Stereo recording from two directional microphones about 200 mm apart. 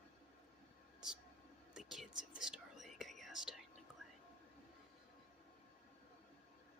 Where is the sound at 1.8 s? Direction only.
Centre (ahead or behind).